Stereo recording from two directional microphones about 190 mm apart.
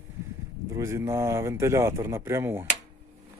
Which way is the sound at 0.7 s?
15° right (ahead or behind).